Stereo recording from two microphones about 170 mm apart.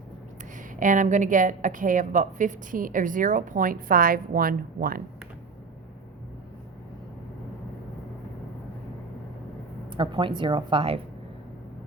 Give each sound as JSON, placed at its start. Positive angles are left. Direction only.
{"t": 0.8, "sound": "a woman's voice", "side_deg": -50}
{"t": 9.9, "sound": "a woman's voice", "side_deg": -30}